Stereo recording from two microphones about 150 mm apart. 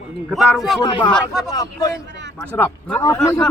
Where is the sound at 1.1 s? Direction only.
Centre (ahead or behind).